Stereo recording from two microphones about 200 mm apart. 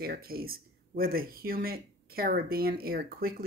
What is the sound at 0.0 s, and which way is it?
Speech, 50° right (ahead or behind).